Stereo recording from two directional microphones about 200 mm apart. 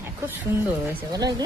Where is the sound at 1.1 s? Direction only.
20° right (ahead or behind).